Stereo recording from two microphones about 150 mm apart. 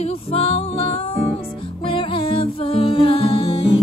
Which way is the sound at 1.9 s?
35° left (ahead or behind).